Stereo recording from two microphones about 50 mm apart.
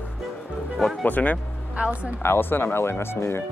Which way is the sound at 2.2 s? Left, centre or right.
Left.